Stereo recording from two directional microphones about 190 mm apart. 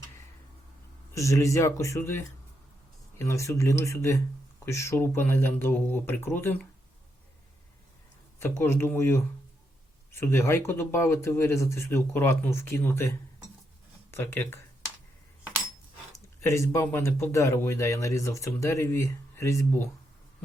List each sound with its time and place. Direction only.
1.1 s speech: 15° left (ahead or behind)
8.4 s speech: 10° left (ahead or behind)
16.4 s speech: 15° left (ahead or behind)